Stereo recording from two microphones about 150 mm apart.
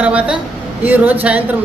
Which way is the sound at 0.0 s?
10° right (ahead or behind).